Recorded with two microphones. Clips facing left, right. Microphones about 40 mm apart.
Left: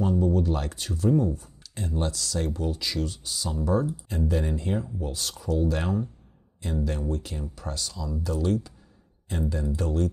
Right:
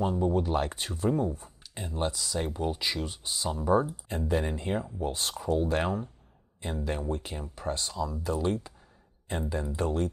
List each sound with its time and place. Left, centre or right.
0.0 s speech: right